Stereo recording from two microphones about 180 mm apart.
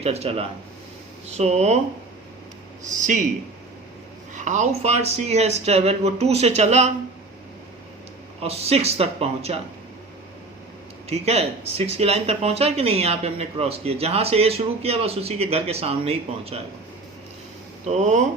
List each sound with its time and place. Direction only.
0.0 s speech: 35° right (ahead or behind)
2.9 s a man's voice: 45° right (ahead or behind)
4.4 s speech: 40° right (ahead or behind)
8.4 s speech: 35° right (ahead or behind)
11.1 s speech: 35° right (ahead or behind)
17.8 s speech: 40° right (ahead or behind)